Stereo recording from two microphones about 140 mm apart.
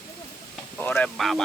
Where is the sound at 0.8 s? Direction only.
15° left (ahead or behind).